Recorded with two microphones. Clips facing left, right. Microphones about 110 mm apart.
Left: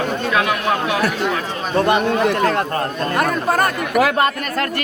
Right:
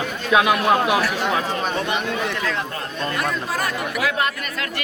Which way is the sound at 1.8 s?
50° left (ahead or behind).